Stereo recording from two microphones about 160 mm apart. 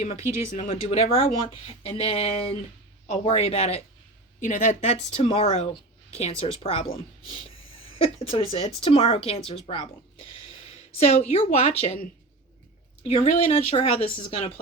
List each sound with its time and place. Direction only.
0.0 s speech: 40° left (ahead or behind)
4.4 s speech: 50° left (ahead or behind)
13.0 s speech: 40° left (ahead or behind)